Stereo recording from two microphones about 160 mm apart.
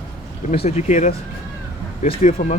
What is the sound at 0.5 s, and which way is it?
Speech, 40° left (ahead or behind).